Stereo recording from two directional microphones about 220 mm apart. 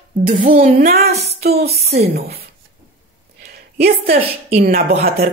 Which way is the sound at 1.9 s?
45° right (ahead or behind).